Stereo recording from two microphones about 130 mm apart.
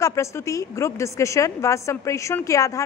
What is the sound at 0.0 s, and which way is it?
Speech, 25° left (ahead or behind).